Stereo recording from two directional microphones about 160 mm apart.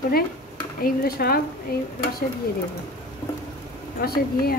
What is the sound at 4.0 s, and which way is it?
Speech, 70° left (ahead or behind).